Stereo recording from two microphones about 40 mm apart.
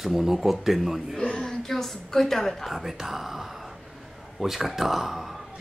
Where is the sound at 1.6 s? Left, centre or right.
Centre.